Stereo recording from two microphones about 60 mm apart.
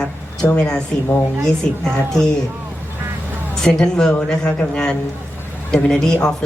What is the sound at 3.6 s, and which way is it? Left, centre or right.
A woman's voice, centre.